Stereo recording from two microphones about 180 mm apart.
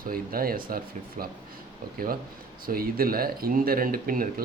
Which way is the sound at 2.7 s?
55° right (ahead or behind).